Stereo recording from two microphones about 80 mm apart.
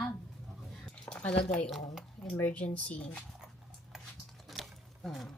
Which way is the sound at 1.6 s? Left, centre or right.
Centre.